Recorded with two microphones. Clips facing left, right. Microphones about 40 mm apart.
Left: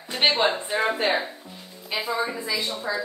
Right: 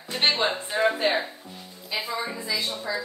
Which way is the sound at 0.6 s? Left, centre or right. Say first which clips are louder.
Left 1 dB; left.